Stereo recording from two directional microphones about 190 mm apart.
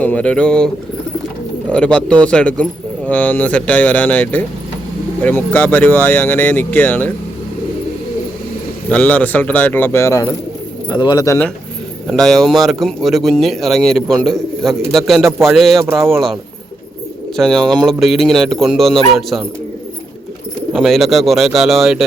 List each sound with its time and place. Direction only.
0.0 s speech: 5° left (ahead or behind)
1.7 s speech: 5° left (ahead or behind)
8.9 s speech: 10° left (ahead or behind)
12.0 s speech: centre (ahead or behind)
17.3 s speech: centre (ahead or behind)
20.7 s speech: centre (ahead or behind)